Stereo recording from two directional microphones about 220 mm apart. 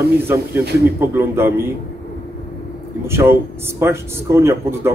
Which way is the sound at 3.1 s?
10° right (ahead or behind).